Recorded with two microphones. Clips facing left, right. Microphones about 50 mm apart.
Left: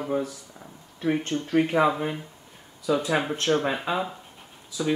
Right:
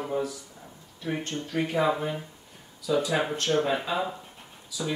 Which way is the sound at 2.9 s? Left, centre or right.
Left.